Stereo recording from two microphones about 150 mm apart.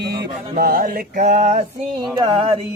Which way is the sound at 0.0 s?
90° right.